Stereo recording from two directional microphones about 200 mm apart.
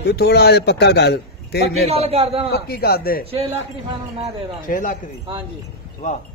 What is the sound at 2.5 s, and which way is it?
Speech, 50° left (ahead or behind).